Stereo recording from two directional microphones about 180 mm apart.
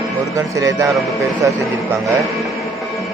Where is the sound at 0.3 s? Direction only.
20° right (ahead or behind).